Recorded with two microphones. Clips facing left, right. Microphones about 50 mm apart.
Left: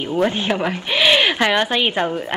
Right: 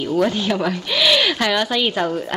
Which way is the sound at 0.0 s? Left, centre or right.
Left.